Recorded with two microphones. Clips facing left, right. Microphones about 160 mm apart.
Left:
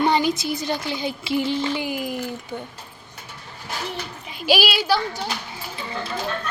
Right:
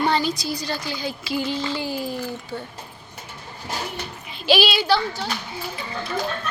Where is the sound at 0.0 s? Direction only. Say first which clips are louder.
Left 2 dB; 20° left (ahead or behind).